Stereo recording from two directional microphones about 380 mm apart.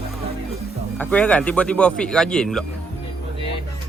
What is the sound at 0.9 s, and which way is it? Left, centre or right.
Speech, centre.